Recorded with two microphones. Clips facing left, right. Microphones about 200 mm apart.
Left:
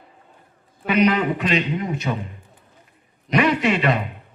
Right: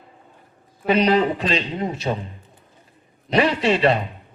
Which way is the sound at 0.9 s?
30° right (ahead or behind).